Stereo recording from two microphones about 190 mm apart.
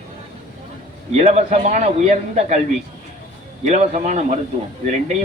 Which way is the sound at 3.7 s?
40° right (ahead or behind).